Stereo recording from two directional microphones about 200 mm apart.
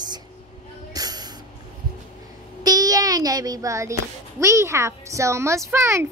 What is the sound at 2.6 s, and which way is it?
A child's voice, 20° right (ahead or behind).